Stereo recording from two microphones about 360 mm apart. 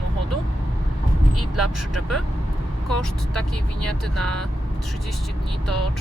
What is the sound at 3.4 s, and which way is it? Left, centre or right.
Speech, centre.